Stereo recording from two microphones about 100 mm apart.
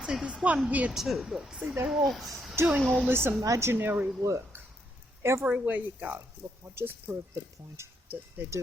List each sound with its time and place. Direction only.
0.0 s speech: 10° right (ahead or behind)
0.9 s speech: 5° right (ahead or behind)
3.1 s speech: 20° right (ahead or behind)
5.5 s speech: 15° right (ahead or behind)